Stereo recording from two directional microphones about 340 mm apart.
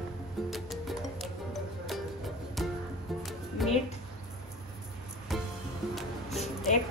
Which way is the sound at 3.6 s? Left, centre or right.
Centre.